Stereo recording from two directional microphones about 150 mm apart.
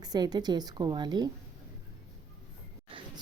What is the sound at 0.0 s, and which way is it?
Speech, 25° right (ahead or behind).